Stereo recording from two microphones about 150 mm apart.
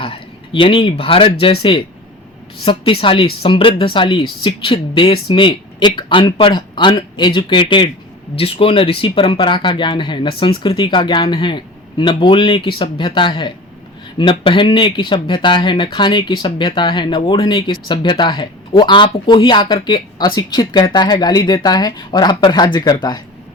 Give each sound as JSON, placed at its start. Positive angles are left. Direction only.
{"t": 0.0, "sound": "speech", "side_deg": 35}